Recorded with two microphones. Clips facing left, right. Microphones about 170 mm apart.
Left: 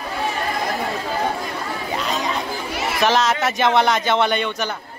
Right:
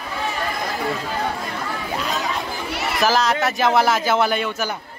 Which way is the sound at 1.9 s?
Centre (ahead or behind).